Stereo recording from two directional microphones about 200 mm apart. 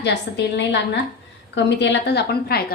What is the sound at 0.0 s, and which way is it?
A woman's voice, 60° left (ahead or behind).